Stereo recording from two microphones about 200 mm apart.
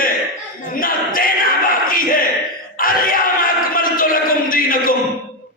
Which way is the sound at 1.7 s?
45° left (ahead or behind).